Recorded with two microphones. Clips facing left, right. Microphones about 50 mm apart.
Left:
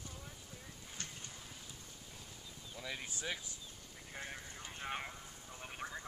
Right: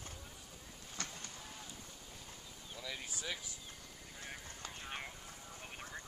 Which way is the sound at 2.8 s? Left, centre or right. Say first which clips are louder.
Left 1 dB; left.